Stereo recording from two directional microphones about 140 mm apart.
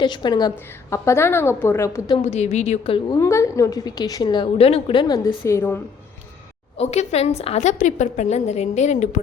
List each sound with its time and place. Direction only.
0.0 s a woman's voice: 30° left (ahead or behind)
0.9 s a woman's voice: 20° left (ahead or behind)
2.2 s a woman's voice: 50° left (ahead or behind)
3.2 s a woman's voice: 20° left (ahead or behind)
6.7 s a woman's voice: 50° left (ahead or behind)